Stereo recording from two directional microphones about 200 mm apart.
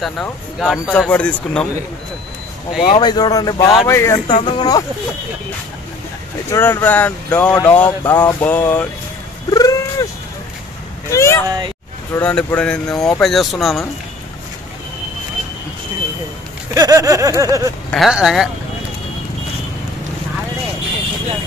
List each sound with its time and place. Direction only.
0.0 s speech: centre (ahead or behind)
2.8 s speech: 20° left (ahead or behind)
4.3 s speech: 25° left (ahead or behind)
6.5 s speech: 15° left (ahead or behind)
9.5 s cat: 15° left (ahead or behind)
11.1 s speech: 15° left (ahead or behind)
11.4 s speech: 20° right (ahead or behind)
12.1 s speech: 5° left (ahead or behind)
16.7 s a sound: 20° right (ahead or behind)
17.9 s speech: centre (ahead or behind)